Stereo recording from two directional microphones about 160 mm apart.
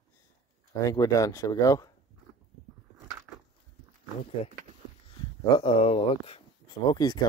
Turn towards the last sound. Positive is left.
turn(degrees=25)  # may be behind; listen again after turning